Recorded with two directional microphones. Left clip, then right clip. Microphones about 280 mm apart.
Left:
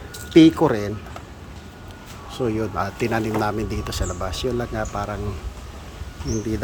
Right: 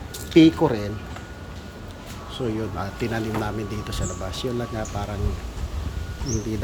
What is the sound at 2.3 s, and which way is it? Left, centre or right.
Speech, centre.